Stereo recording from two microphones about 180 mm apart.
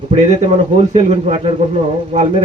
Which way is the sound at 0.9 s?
35° right (ahead or behind).